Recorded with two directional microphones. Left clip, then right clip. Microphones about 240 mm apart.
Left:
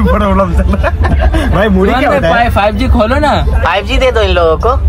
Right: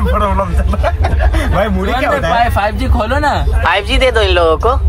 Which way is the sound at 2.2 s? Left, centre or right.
Left.